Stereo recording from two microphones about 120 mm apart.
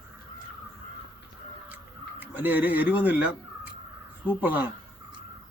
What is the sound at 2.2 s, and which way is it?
Speech, 15° right (ahead or behind).